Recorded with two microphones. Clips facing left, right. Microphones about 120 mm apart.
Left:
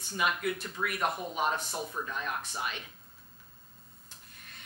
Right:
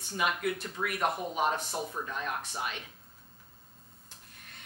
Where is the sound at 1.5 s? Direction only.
25° right (ahead or behind); by 2.9 s 45° right (ahead or behind).